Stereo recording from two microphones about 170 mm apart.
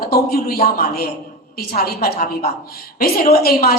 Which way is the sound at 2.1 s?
45° left (ahead or behind).